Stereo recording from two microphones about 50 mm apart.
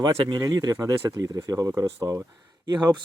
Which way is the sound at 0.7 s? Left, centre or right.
Right.